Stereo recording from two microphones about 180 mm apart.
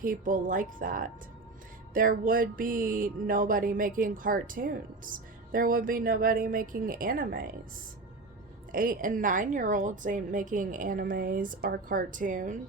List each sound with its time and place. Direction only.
0.0 s music: 50° right (ahead or behind)
8.7 s music: 50° right (ahead or behind)